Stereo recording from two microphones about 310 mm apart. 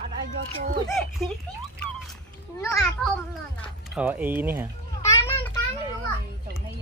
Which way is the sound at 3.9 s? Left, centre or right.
Centre.